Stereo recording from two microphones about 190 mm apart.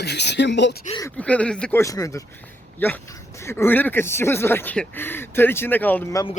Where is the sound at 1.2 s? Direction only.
5° left (ahead or behind).